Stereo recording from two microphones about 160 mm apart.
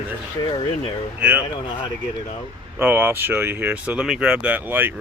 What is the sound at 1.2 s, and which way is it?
Speech, 10° right (ahead or behind).